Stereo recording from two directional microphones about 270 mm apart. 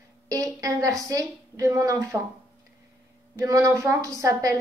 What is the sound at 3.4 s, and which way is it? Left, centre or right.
A woman's voice, centre.